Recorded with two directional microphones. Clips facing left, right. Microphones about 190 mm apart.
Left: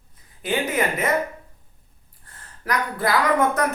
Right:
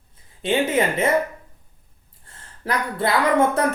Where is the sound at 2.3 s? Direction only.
25° right (ahead or behind).